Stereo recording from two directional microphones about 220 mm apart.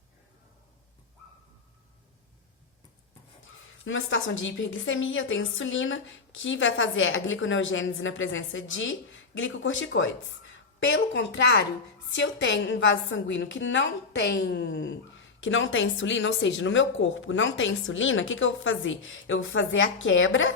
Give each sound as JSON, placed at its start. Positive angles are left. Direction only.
{"t": 3.8, "sound": "a woman's voice", "side_deg": 60}